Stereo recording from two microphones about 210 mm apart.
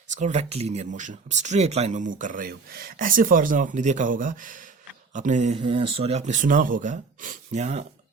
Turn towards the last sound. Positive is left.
turn(degrees=-30)  # may be behind; listen again after turning